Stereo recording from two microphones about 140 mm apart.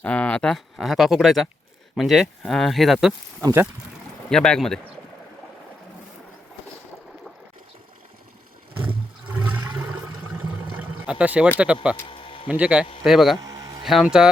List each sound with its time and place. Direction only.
0.0 s speech: 10° left (ahead or behind)
3.4 s speech: 20° right (ahead or behind)
4.3 s speech: 5° left (ahead or behind)
9.2 s toilet flush: 10° right (ahead or behind)
11.5 s a man's voice: 10° right (ahead or behind)
12.0 s a sound: 40° left (ahead or behind)
12.5 s a man's voice: 10° right (ahead or behind)
13.4 s a sound: 25° right (ahead or behind)
13.8 s speech: 5° right (ahead or behind)